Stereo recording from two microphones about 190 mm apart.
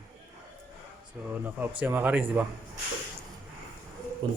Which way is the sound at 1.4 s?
10° right (ahead or behind).